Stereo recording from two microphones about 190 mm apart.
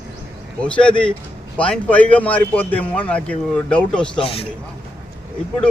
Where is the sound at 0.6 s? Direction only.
5° left (ahead or behind).